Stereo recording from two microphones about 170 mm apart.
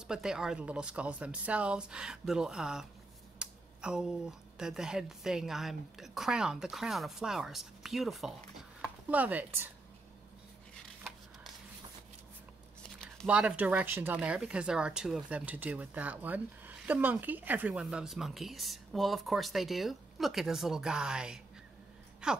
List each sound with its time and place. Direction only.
0.0 s speech: 5° right (ahead or behind)
13.3 s speech: 5° right (ahead or behind)